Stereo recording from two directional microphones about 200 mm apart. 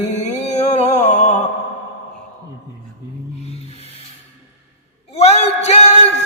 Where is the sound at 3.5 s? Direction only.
30° left (ahead or behind).